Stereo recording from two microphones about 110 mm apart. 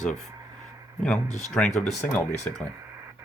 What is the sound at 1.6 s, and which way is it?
Speech, 10° left (ahead or behind).